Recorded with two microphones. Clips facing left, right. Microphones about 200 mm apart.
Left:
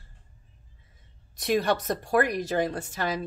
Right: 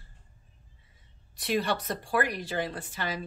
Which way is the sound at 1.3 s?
45° left (ahead or behind).